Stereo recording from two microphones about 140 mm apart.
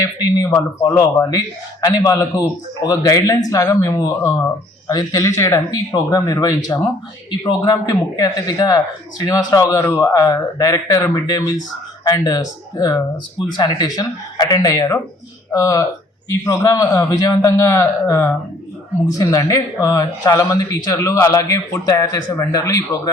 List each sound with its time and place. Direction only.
0.2 s speech: 25° left (ahead or behind)